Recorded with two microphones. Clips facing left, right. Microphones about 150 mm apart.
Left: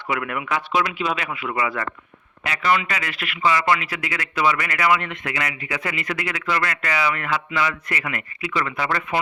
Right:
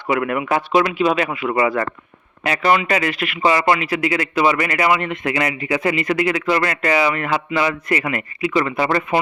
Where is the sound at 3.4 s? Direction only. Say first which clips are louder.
Right 4 dB; 30° right (ahead or behind).